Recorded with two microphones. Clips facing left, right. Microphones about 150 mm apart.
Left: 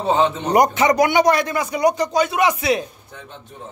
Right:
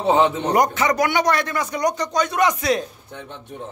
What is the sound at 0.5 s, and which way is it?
Speech, 15° left (ahead or behind).